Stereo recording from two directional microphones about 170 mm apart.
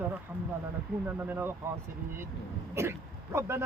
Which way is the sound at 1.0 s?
10° right (ahead or behind).